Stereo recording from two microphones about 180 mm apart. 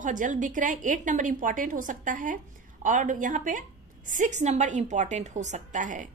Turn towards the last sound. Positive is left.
turn(degrees=-45)  # may be behind; listen again after turning